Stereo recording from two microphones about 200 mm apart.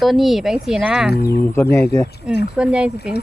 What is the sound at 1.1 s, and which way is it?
Speech, 55° left (ahead or behind).